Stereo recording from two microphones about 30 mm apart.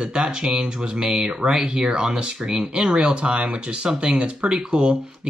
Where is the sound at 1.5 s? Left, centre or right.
Centre.